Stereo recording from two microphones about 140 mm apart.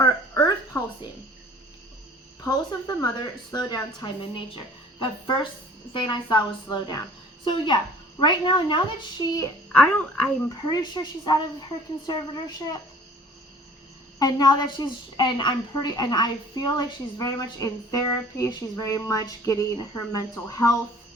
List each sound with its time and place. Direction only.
0.0 s a sound: 30° left (ahead or behind)
2.4 s a woman's voice: 30° left (ahead or behind)
9.7 s speech: 10° left (ahead or behind)
10.7 s a woman's voice: 30° left (ahead or behind)
14.2 s a woman's voice: 30° left (ahead or behind)